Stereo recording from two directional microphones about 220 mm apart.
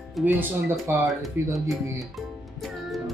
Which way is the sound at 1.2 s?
Centre (ahead or behind).